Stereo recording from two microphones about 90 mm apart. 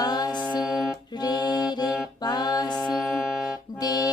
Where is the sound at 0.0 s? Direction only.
50° left (ahead or behind).